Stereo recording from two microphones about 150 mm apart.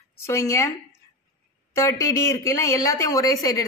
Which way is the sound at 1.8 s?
20° left (ahead or behind).